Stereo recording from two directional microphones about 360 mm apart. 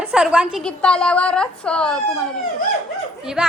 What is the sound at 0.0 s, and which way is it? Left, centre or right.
A child's voice, centre.